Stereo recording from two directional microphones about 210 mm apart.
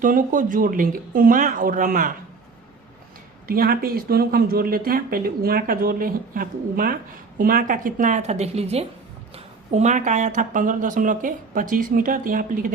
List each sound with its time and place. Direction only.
0.0 s speech: 40° right (ahead or behind)
3.4 s speech: 45° right (ahead or behind)